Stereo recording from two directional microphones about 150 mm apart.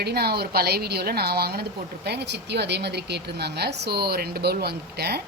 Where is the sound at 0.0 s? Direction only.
90° right.